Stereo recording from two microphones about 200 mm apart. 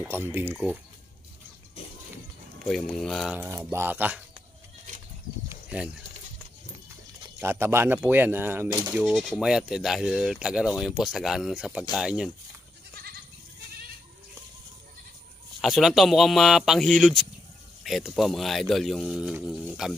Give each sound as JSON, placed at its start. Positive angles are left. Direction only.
{"t": 0.0, "sound": "speech", "side_deg": -10}
{"t": 2.6, "sound": "speech", "side_deg": 0}
{"t": 3.3, "sound": "speech", "side_deg": -15}
{"t": 5.5, "sound": "a sound", "side_deg": -5}
{"t": 7.3, "sound": "speech", "side_deg": -10}
{"t": 8.6, "sound": "speech", "side_deg": -20}
{"t": 8.9, "sound": "speech", "side_deg": 0}
{"t": 15.6, "sound": "speech", "side_deg": 0}